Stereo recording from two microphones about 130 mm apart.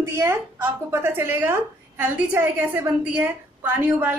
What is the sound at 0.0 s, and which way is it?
A woman's voice, 20° right (ahead or behind).